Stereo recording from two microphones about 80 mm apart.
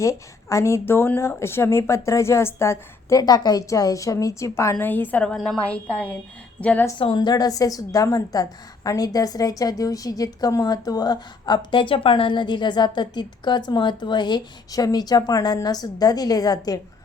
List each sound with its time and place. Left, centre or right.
0.0 s speech: left
3.2 s a woman's voice: left
4.8 s a woman's voice: left
7.1 s a woman's voice: left